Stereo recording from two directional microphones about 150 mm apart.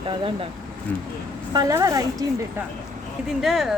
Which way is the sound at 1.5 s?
25° right (ahead or behind).